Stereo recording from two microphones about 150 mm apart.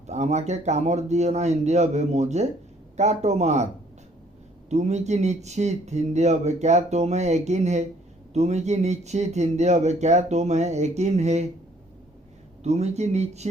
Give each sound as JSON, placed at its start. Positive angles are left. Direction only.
{"t": 0.1, "sound": "speech", "side_deg": -50}
{"t": 4.7, "sound": "speech", "side_deg": -50}
{"t": 12.6, "sound": "speech", "side_deg": -45}